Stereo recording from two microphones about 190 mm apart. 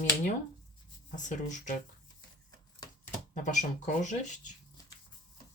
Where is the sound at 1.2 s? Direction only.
40° left (ahead or behind).